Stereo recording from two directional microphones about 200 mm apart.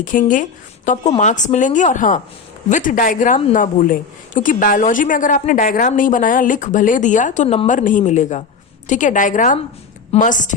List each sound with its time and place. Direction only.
0.0 s a woman's voice: 40° left (ahead or behind)